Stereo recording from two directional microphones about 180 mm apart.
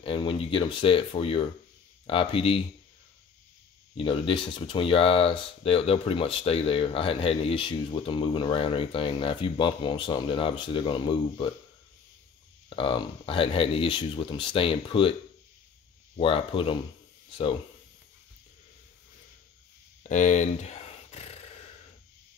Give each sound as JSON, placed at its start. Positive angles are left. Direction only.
{"t": 0.0, "sound": "speech", "side_deg": 30}
{"t": 3.9, "sound": "speech", "side_deg": 30}
{"t": 12.6, "sound": "speech", "side_deg": 30}
{"t": 16.2, "sound": "speech", "side_deg": 30}
{"t": 20.0, "sound": "a sound", "side_deg": 40}